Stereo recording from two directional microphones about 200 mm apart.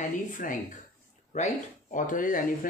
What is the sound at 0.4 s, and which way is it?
Speech, 45° left (ahead or behind).